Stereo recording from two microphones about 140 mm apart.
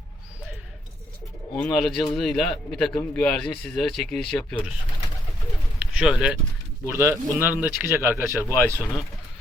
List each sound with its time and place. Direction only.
1.5 s speech: 10° left (ahead or behind)
6.0 s speech: 5° right (ahead or behind)
6.8 s speech: 15° right (ahead or behind)